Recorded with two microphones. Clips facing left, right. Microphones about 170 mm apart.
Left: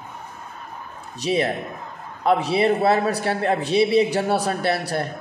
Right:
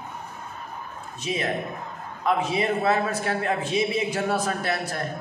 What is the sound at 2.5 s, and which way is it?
A man's voice, 35° left (ahead or behind).